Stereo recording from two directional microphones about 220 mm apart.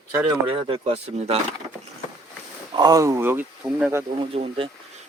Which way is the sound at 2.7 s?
15° right (ahead or behind).